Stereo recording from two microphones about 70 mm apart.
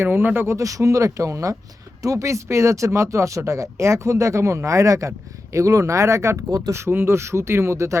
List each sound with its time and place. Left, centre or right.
0.0 s speech: right
0.5 s speech: right